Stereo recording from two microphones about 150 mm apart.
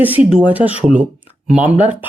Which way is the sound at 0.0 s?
10° right (ahead or behind).